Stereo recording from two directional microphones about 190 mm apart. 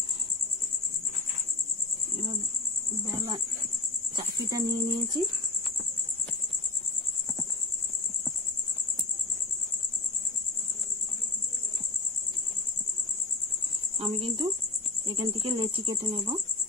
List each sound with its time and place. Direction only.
3.1 s cricket: 20° right (ahead or behind)
4.5 s cricket: 20° right (ahead or behind)
13.9 s cricket: 30° right (ahead or behind)